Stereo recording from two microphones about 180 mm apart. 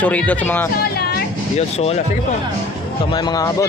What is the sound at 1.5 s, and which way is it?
Speech, 35° left (ahead or behind).